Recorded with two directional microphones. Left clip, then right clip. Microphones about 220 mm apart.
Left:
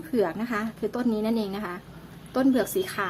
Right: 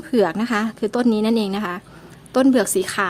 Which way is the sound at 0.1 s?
40° right (ahead or behind).